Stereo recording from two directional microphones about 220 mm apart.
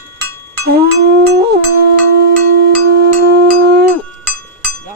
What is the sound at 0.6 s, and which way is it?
Music, 45° right (ahead or behind).